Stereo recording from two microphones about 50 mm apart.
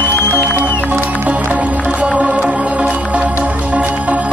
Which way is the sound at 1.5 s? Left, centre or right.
Right.